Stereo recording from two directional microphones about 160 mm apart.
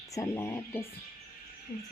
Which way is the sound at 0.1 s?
20° left (ahead or behind).